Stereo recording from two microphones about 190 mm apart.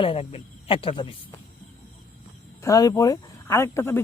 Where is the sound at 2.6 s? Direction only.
15° left (ahead or behind).